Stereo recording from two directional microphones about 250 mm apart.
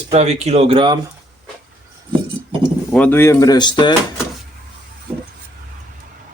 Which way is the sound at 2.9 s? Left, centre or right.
Centre.